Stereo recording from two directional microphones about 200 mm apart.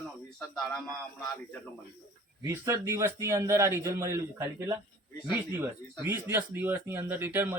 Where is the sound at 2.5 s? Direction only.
15° right (ahead or behind).